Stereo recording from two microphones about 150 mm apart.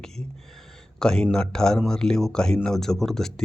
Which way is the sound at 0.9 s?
5° left (ahead or behind).